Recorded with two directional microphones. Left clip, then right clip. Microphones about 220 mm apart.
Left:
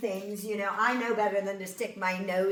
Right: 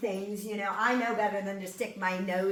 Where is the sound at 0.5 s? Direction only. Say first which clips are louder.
Left 1 dB; 40° left (ahead or behind).